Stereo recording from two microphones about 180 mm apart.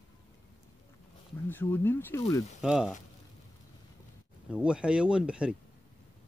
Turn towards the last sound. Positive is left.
turn(degrees=-5)  # may be behind; listen again after turning